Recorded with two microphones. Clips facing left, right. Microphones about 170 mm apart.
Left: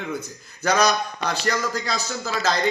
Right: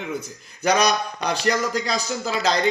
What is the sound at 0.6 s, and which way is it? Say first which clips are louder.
Speech: right 1 dB; 15° right (ahead or behind).